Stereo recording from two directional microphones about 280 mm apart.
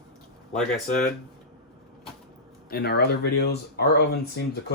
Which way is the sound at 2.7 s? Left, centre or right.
Left.